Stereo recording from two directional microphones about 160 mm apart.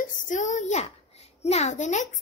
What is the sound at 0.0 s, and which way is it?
A child's voice, 55° left (ahead or behind).